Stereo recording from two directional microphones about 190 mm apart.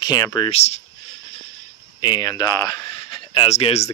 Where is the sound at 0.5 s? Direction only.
35° left (ahead or behind).